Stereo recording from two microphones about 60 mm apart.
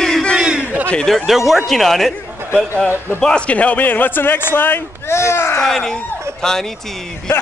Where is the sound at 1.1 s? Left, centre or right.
Centre.